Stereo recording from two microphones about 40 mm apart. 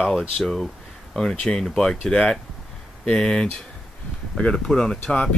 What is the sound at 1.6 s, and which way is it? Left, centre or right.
Speech, centre.